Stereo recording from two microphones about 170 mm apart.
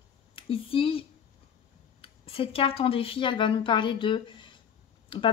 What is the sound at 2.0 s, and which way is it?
Speech, 35° left (ahead or behind).